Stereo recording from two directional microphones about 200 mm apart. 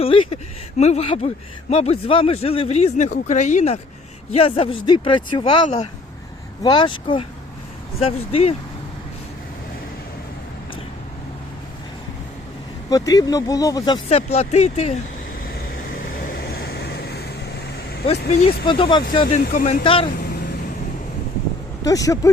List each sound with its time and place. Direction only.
0.0 s speech: 30° left (ahead or behind)
12.9 s speech: 20° left (ahead or behind); by 14.9 s 35° left (ahead or behind)
16.0 s vehicle: 45° left (ahead or behind)
18.3 s speech: 35° left (ahead or behind)
18.6 s speech: 25° left (ahead or behind)
19.4 s speech: 50° left (ahead or behind)
19.8 s speech: 25° left (ahead or behind)
21.8 s speech: 15° left (ahead or behind)